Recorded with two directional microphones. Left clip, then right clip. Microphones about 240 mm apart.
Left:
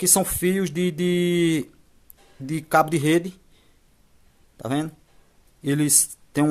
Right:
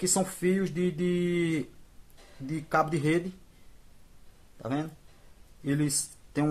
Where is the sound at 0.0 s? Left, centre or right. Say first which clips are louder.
Left 6 dB; left.